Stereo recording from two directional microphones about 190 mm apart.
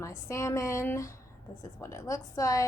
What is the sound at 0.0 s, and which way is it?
A woman's voice, 15° left (ahead or behind).